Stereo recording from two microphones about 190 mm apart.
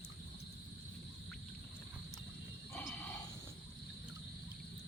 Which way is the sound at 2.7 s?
10° left (ahead or behind).